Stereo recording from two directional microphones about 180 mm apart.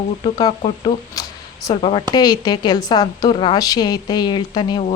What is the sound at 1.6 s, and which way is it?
Speech, 20° left (ahead or behind).